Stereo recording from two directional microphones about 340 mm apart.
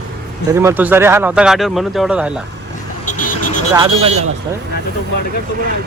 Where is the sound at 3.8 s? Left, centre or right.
Centre.